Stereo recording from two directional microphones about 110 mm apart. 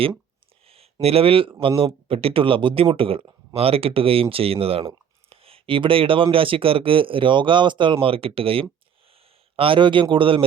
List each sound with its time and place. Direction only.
1.0 s speech: 60° right (ahead or behind)
5.3 s a sound: 60° right (ahead or behind)
6.3 s a man's voice: 55° right (ahead or behind)